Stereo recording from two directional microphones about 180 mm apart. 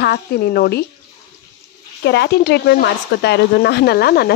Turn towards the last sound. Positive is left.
turn(degrees=60)  # may be behind; listen again after turning